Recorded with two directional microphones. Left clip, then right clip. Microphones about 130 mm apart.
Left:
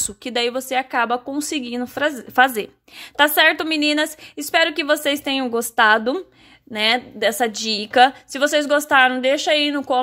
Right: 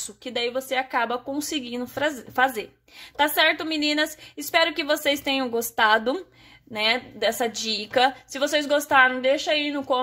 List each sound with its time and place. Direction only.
0.0 s speech: 50° left (ahead or behind)